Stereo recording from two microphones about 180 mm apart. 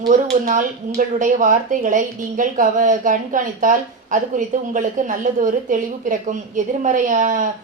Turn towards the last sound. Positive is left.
turn(degrees=-45)  # may be behind; listen again after turning